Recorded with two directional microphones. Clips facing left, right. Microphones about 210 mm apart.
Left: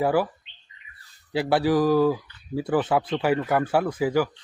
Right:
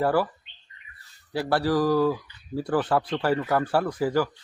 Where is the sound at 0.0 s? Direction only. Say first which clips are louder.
Left 1 dB; 10° left (ahead or behind).